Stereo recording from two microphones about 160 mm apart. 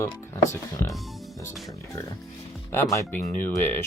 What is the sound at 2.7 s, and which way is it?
Speech, 15° left (ahead or behind).